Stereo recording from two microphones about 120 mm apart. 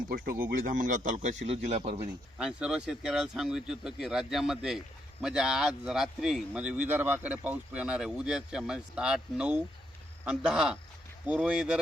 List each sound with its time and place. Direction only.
0.7 s a man's voice: 90° right; by 2.0 s 65° right (ahead or behind)
2.4 s speech: 5° right (ahead or behind)